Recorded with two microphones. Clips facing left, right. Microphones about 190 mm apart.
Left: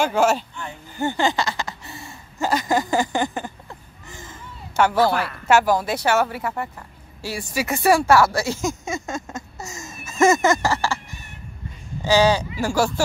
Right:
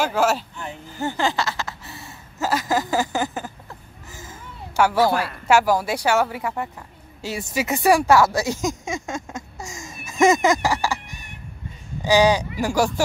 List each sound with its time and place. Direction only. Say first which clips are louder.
0.0 s speech: left 2 dB; 5° right (ahead or behind)
0.9 s a sound: left 2 dB; centre (ahead or behind)
5.5 s speech: even; 10° right (ahead or behind)